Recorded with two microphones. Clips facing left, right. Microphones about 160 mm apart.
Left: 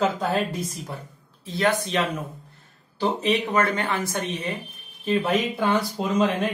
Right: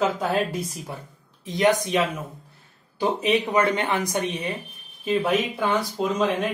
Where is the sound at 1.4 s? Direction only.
15° right (ahead or behind).